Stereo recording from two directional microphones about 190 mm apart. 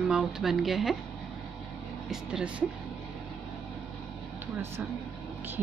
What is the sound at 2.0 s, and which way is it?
Speech, 5° right (ahead or behind).